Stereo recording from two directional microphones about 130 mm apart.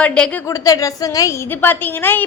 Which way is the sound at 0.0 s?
5° left (ahead or behind).